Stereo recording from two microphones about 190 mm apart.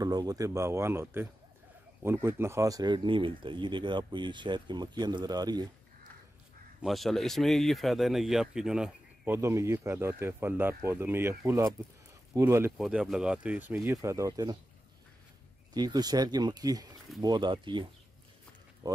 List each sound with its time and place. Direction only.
0.0 s speech: 20° right (ahead or behind)
6.8 s speech: centre (ahead or behind)
12.7 s speech: 5° right (ahead or behind); by 14.6 s 20° right (ahead or behind)
15.7 s speech: 20° right (ahead or behind)